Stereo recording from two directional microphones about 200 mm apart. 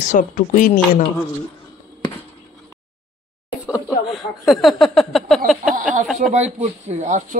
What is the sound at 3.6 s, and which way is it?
Speech, 5° right (ahead or behind).